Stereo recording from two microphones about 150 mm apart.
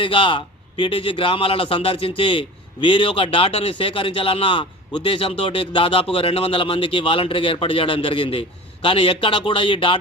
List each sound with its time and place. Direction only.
0.0 s a man's voice: 35° left (ahead or behind)